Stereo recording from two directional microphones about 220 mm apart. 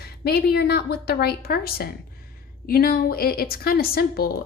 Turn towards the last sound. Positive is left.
turn(degrees=45)  # may be behind; listen again after turning